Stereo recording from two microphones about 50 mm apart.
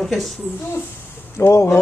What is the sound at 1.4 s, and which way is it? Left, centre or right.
Speech, left.